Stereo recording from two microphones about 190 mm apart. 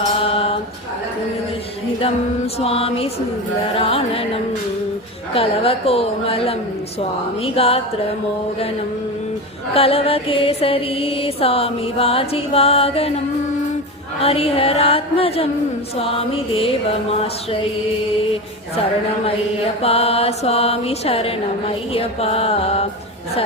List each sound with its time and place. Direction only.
0.3 s music: 30° left (ahead or behind)
2.6 s music: 30° left (ahead or behind)
5.3 s music: 30° left (ahead or behind)
9.7 s music: 30° left (ahead or behind)
14.2 s music: 30° left (ahead or behind)
19.8 s music: 30° left (ahead or behind)